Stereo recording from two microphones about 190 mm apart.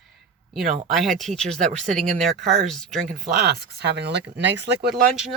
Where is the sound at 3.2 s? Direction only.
55° right (ahead or behind).